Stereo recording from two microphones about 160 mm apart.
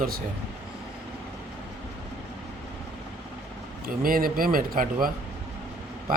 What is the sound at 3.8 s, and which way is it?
Speech, 65° right (ahead or behind).